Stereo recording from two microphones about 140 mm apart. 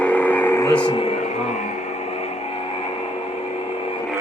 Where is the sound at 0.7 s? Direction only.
35° left (ahead or behind).